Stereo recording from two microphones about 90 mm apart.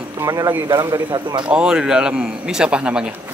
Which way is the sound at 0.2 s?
40° right (ahead or behind).